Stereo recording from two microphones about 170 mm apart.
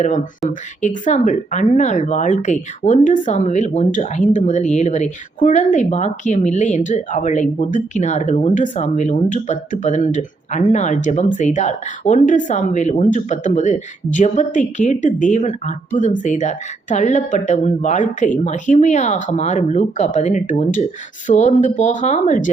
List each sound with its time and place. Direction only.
0.0 s speech: 45° left (ahead or behind)